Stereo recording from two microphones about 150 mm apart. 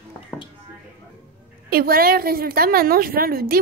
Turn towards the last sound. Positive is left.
turn(degrees=-85)